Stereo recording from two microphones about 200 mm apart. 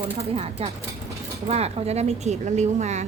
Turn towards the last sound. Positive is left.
turn(degrees=-35)  # may be behind; listen again after turning